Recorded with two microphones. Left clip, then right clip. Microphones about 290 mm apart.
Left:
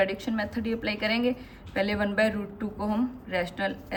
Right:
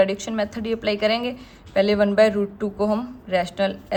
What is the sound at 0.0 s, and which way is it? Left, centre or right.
A woman's voice, right.